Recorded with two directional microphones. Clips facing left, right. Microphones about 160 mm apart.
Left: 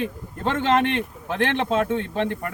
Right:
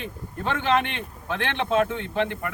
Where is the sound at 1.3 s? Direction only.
35° left (ahead or behind).